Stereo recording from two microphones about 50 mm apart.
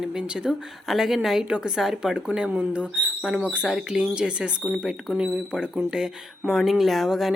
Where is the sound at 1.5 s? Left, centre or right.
Centre.